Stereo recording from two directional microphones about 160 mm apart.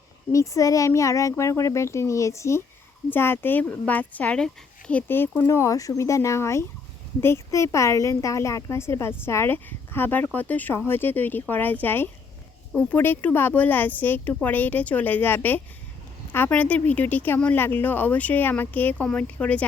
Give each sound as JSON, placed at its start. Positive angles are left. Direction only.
{"t": 0.3, "sound": "speech", "side_deg": 20}